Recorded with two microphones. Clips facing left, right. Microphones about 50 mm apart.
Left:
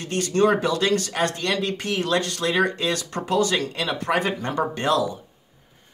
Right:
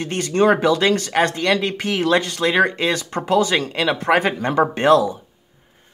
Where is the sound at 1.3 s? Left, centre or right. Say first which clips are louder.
Right 6 dB; right.